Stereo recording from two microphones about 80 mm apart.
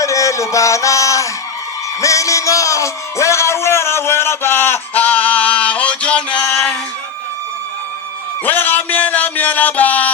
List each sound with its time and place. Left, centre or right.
0.0 s a sound: left
2.0 s music: left; by 6.7 s centre
8.4 s music: left